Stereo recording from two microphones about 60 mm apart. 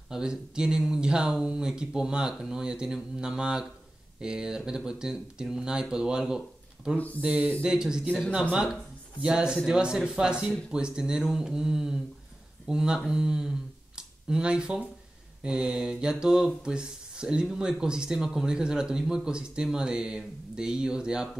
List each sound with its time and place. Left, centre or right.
0.1 s speech: centre
7.2 s speech: right
7.6 s speech: centre